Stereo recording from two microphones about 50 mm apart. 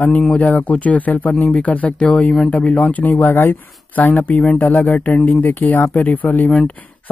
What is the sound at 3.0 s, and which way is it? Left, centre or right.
Speech, left.